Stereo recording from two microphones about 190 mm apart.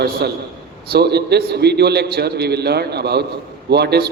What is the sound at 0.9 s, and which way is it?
A man's voice, 60° right (ahead or behind).